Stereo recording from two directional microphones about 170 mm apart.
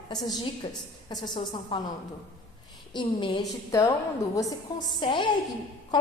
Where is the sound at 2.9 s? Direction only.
25° left (ahead or behind).